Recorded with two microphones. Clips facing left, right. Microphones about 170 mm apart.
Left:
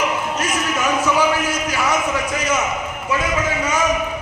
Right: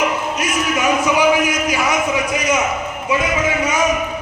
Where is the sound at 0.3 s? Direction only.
10° right (ahead or behind).